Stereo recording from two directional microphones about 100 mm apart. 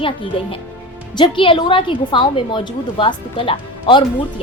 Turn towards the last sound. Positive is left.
turn(degrees=60)  # may be behind; listen again after turning